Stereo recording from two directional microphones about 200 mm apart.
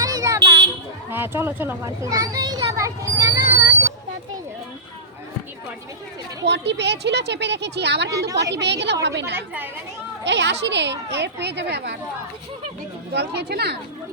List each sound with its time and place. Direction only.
0.0 s a sound: 15° right (ahead or behind)
1.1 s a child's voice: 10° right (ahead or behind)
6.4 s speech: 60° right (ahead or behind)
13.1 s speech: 55° right (ahead or behind)